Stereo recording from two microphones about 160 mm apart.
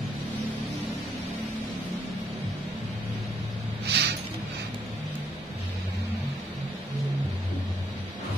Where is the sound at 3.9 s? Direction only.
90° right.